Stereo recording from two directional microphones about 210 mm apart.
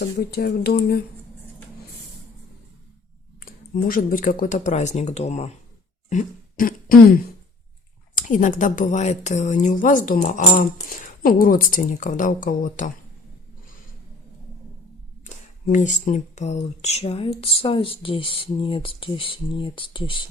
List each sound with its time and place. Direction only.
0.2 s speech: 45° left (ahead or behind)
3.4 s a woman's voice: 40° left (ahead or behind)
6.1 s throat clearing: 40° left (ahead or behind)
8.1 s a woman's voice: 40° left (ahead or behind)
15.7 s speech: 35° left (ahead or behind)